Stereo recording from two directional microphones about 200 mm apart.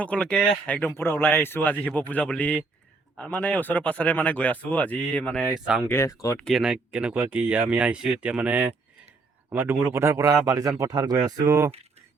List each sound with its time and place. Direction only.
0.0 s speech: 5° left (ahead or behind)
5.8 s speech: 15° left (ahead or behind)
6.5 s speech: 5° right (ahead or behind)